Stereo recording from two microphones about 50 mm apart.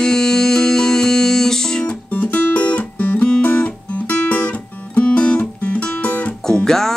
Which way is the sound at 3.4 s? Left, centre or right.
Left.